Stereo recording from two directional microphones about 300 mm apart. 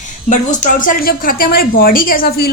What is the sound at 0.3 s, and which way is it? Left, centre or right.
A woman's voice, left.